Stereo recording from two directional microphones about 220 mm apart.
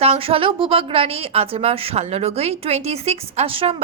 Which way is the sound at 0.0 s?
25° right (ahead or behind).